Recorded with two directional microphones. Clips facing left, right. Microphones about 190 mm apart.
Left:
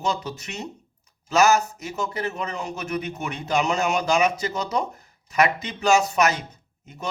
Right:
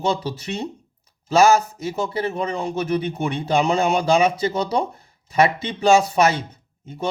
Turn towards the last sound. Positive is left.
turn(degrees=-30)  # may be behind; listen again after turning